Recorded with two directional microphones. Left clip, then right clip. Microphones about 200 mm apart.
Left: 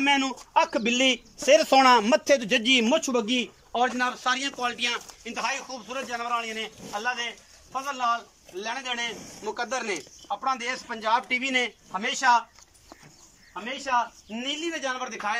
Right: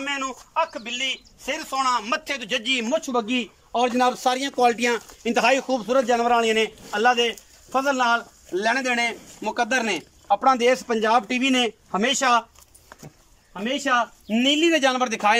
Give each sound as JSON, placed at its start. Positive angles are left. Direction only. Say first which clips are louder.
{"t": 0.0, "sound": "a man's voice", "louder": "left 4 dB", "side_deg": 45}
{"t": 3.7, "sound": "speech", "louder": "right 5 dB", "side_deg": -20}
{"t": 13.5, "sound": "speech", "louder": "right 5 dB", "side_deg": -50}